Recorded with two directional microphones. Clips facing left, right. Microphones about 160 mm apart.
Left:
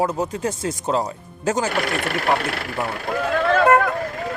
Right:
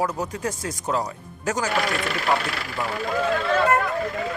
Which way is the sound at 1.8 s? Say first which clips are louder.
Left 2 dB; 55° left (ahead or behind).